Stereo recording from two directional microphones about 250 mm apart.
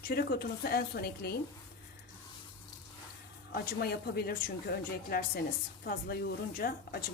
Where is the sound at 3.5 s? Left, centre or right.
Left.